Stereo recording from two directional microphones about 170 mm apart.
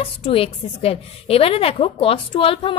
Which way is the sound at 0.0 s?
35° left (ahead or behind).